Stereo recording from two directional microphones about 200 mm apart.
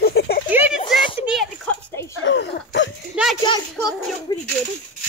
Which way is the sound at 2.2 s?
60° left (ahead or behind).